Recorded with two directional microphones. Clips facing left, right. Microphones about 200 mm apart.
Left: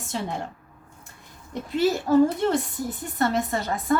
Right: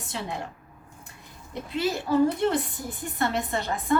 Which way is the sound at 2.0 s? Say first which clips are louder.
Left 1 dB; 45° left (ahead or behind).